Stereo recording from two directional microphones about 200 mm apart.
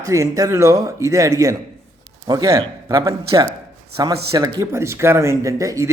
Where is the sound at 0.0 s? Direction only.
15° right (ahead or behind).